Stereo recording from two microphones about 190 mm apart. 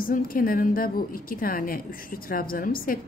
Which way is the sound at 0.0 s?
50° left (ahead or behind).